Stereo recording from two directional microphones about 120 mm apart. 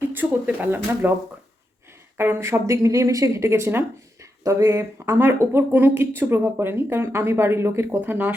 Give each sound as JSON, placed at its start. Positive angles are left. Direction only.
{"t": 0.1, "sound": "speech", "side_deg": -15}
{"t": 2.1, "sound": "speech", "side_deg": -20}